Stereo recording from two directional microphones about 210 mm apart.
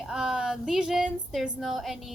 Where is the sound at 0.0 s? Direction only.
5° right (ahead or behind).